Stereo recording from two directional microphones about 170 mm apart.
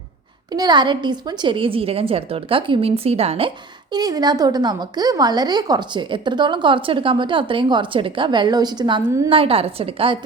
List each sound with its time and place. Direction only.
0.5 s a woman's voice: 25° right (ahead or behind)
3.9 s speech: 25° right (ahead or behind)
9.3 s a woman's voice: 35° right (ahead or behind)